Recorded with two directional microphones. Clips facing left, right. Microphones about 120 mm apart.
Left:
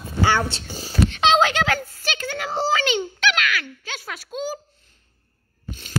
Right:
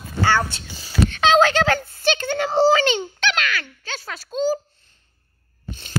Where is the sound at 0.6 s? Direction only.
40° left (ahead or behind).